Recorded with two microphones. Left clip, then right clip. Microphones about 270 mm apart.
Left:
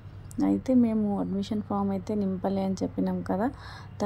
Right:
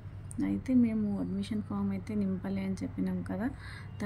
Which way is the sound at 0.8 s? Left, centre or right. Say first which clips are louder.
Left 5 dB; left.